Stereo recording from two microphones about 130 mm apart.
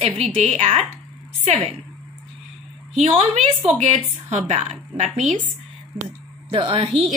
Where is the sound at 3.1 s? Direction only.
50° right (ahead or behind).